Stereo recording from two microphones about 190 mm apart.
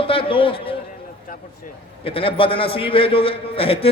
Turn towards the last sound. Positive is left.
turn(degrees=30)  # may be behind; listen again after turning